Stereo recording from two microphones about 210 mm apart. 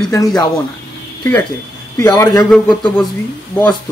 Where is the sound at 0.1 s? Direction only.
15° left (ahead or behind).